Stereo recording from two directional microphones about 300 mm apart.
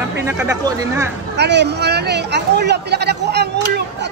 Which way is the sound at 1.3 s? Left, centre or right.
Right.